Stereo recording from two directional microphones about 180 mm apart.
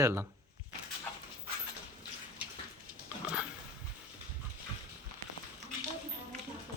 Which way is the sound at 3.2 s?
5° right (ahead or behind).